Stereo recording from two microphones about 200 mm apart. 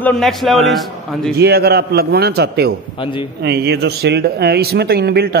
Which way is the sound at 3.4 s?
55° right (ahead or behind).